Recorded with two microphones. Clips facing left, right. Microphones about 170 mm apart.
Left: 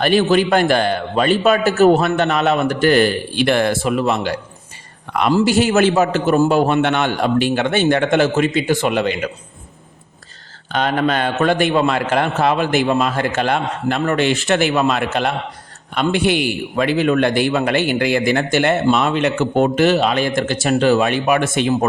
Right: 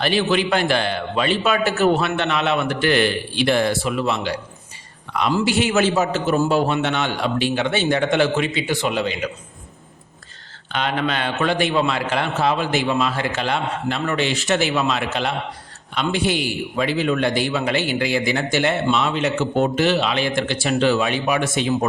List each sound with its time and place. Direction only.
0.0 s a man's voice: 50° left (ahead or behind)
5.8 s a man's voice: 60° left (ahead or behind)
10.7 s a man's voice: 45° left (ahead or behind)